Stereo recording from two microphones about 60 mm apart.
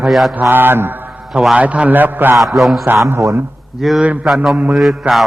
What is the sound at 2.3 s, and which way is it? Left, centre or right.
Speech, centre.